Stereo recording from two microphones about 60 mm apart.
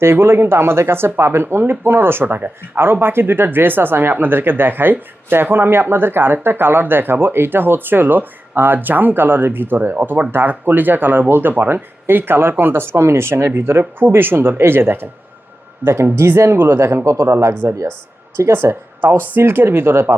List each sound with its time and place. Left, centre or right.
0.0 s speech: right
17.3 s speech: right